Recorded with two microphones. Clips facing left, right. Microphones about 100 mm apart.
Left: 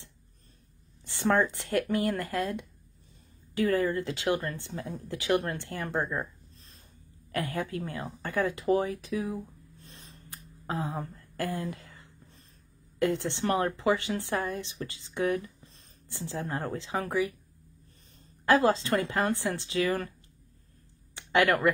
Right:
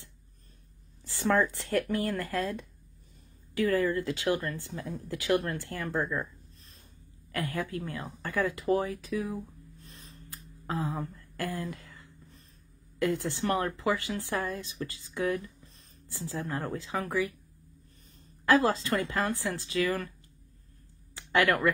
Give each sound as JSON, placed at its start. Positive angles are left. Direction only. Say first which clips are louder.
{"t": 1.0, "sound": "a woman's voice", "louder": "left 1 dB", "side_deg": 25}
{"t": 7.3, "sound": "a woman's voice", "louder": "left 1 dB", "side_deg": 25}
{"t": 10.7, "sound": "a sound", "louder": "even", "side_deg": 20}
{"t": 13.0, "sound": "a woman's voice", "louder": "left 1 dB", "side_deg": 25}
{"t": 18.4, "sound": "a woman's voice", "louder": "left 1 dB", "side_deg": 25}
{"t": 21.1, "sound": "a sound", "louder": "left 1 dB", "side_deg": 20}